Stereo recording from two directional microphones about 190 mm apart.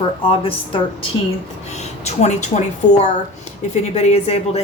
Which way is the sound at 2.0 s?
35° left (ahead or behind).